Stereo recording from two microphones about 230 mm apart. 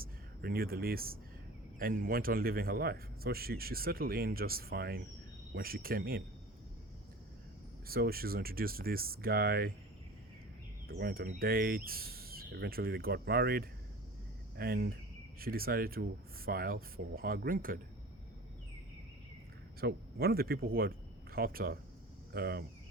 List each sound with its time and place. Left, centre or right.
0.0 s speech: right
7.9 s speech: right
10.8 s speech: right
19.8 s speech: right